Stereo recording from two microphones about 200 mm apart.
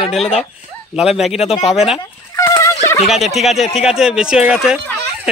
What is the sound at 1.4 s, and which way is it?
Speech, 30° left (ahead or behind).